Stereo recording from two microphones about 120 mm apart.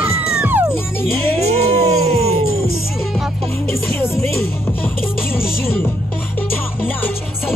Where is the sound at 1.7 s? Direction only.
55° right (ahead or behind).